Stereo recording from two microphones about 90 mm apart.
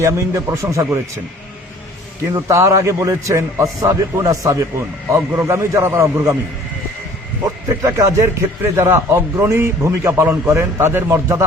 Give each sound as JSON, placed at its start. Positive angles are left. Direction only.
{"t": 0.0, "sound": "a man's voice", "side_deg": -35}
{"t": 2.5, "sound": "a man's voice", "side_deg": -35}
{"t": 7.8, "sound": "speech", "side_deg": -35}